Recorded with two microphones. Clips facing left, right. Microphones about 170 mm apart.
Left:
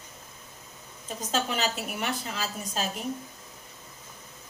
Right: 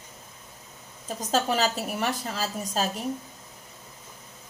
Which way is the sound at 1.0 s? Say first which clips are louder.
Right 4 dB; 40° right (ahead or behind).